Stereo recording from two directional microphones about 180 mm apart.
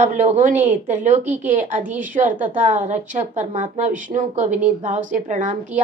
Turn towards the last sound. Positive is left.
turn(degrees=-45)  # may be behind; listen again after turning